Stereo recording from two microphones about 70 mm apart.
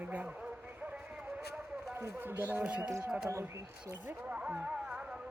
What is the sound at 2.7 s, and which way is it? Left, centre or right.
Speech, centre.